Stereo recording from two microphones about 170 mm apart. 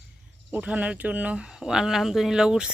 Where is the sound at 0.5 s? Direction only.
10° right (ahead or behind).